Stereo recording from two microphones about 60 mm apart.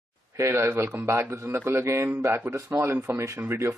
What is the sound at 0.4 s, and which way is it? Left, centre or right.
Speech, right.